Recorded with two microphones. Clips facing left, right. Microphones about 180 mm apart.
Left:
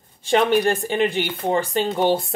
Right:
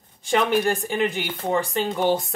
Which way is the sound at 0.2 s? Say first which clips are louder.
Left 3 dB; 25° left (ahead or behind).